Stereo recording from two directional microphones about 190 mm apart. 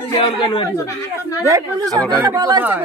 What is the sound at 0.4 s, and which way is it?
Speech, 20° left (ahead or behind).